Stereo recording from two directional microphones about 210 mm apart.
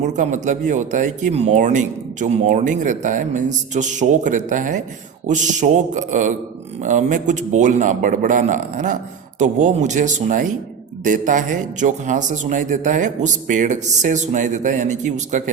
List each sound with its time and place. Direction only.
0.0 s speech: 35° right (ahead or behind)